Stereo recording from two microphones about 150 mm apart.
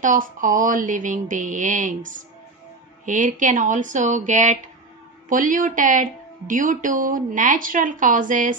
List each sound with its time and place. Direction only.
0.0 s speech: 60° right (ahead or behind)